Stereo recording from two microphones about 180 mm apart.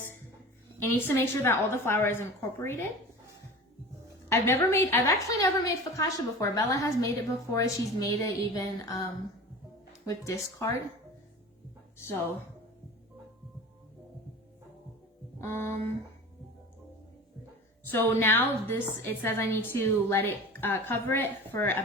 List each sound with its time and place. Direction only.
0.8 s a woman's voice: 10° left (ahead or behind)
4.3 s a woman's voice: 15° left (ahead or behind)
10.1 s a woman's voice: 20° left (ahead or behind)
15.4 s a woman's voice: 15° left (ahead or behind)
17.8 s a woman's voice: 10° left (ahead or behind)